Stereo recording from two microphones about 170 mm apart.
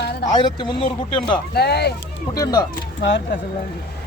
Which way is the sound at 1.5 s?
70° left (ahead or behind).